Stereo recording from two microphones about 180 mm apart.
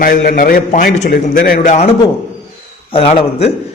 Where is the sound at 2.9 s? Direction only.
30° left (ahead or behind).